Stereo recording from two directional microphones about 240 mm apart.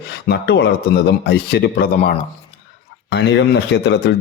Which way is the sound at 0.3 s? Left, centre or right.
Left.